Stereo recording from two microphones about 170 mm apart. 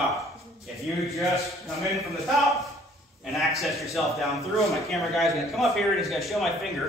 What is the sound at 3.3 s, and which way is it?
A man's voice, centre (ahead or behind).